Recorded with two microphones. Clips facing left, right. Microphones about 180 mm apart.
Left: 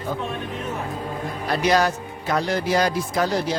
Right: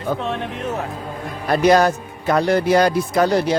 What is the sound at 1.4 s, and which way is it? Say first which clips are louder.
A man's voice: right 6 dB; 50° right (ahead or behind).